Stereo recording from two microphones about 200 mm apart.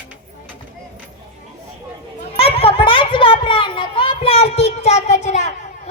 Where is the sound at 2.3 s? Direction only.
30° left (ahead or behind).